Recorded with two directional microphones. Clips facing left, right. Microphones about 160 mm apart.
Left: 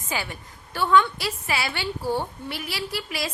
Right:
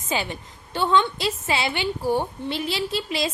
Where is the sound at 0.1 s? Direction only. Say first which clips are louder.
Right 4 dB; 20° right (ahead or behind).